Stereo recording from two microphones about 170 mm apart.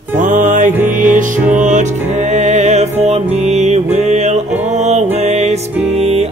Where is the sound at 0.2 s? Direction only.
50° right (ahead or behind).